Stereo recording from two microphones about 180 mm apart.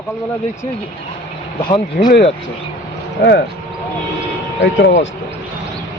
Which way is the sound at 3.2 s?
70° left (ahead or behind).